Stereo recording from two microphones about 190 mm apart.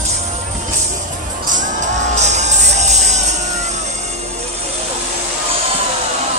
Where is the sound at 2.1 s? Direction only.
35° right (ahead or behind).